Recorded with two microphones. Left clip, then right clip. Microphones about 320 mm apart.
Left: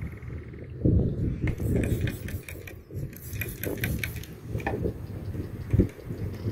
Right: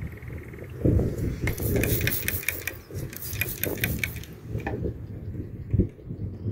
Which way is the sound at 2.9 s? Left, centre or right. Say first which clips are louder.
Right 4 dB; centre.